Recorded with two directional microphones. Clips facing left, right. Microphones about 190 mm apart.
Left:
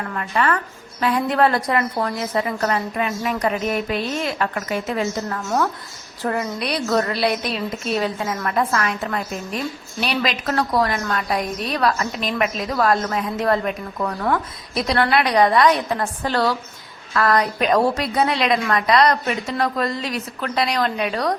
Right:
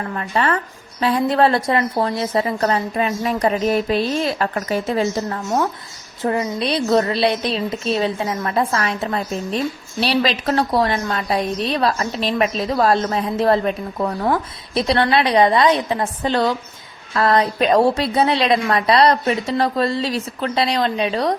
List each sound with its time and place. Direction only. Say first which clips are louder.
0.1 s a woman's voice: right 1 dB; 30° right (ahead or behind)
5.4 s a woman's voice: right 1 dB; 20° right (ahead or behind)